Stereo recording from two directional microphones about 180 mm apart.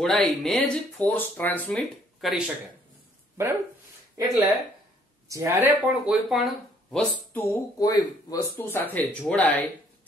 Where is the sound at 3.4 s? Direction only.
15° right (ahead or behind).